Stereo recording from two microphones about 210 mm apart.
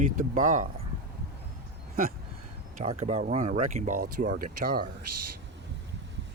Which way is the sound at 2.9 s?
30° right (ahead or behind).